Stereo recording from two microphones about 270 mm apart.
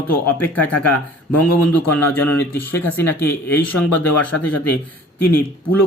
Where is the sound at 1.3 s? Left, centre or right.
Left.